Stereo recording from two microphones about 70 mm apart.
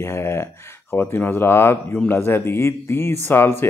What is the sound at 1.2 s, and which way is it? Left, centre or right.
A man's voice, left.